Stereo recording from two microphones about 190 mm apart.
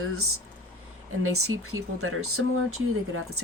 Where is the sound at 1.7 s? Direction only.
90° right.